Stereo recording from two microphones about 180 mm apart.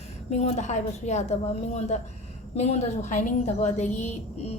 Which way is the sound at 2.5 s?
40° left (ahead or behind).